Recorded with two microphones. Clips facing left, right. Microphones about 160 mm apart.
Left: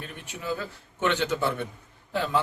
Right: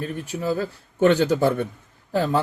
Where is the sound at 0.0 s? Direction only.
40° right (ahead or behind).